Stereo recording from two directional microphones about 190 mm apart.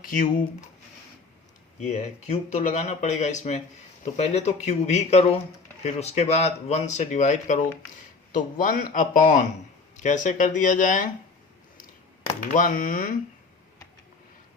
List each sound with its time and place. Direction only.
0.0 s speech: 45° left (ahead or behind)
1.8 s speech: 40° left (ahead or behind)
12.4 s speech: 45° left (ahead or behind)